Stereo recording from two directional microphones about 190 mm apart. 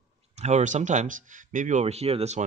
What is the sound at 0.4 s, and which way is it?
A man's voice, 35° right (ahead or behind).